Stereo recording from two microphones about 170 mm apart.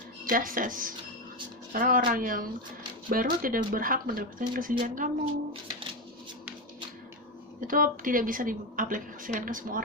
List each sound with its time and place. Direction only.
0.3 s speech: 55° right (ahead or behind)
7.6 s a woman's voice: 55° right (ahead or behind)